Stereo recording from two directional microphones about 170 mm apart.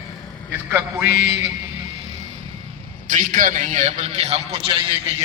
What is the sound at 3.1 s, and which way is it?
A man's voice, 50° right (ahead or behind).